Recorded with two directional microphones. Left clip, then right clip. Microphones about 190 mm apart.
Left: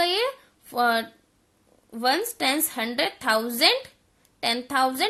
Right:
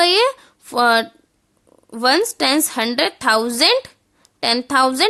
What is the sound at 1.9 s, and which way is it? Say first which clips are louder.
A woman's voice: right 8 dB; 40° right (ahead or behind).